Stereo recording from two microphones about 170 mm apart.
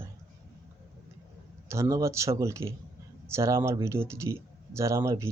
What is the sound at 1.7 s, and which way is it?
Speech, 15° right (ahead or behind).